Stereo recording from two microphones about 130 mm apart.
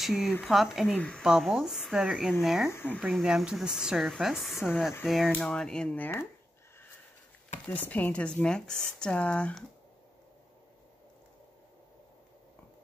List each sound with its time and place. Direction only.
0.0 s a woman's voice: centre (ahead or behind)
0.9 s speech: 10° left (ahead or behind)
1.2 s a woman's voice: centre (ahead or behind)
2.7 s speech: 15° left (ahead or behind)
3.1 s a woman's voice: centre (ahead or behind)
7.6 s speech: 10° left (ahead or behind)